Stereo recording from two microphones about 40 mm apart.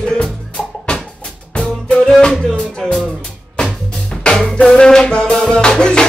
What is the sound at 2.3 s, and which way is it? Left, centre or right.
Music, centre.